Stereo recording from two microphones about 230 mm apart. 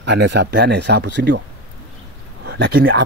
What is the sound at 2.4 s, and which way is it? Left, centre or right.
Speech, right.